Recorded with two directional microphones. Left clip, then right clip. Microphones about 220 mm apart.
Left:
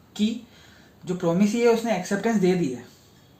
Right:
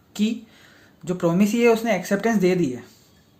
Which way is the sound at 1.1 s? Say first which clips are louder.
Right 2 dB; 50° right (ahead or behind).